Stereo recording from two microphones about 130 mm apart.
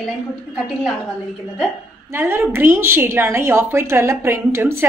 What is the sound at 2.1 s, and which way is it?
A woman's voice, 15° right (ahead or behind).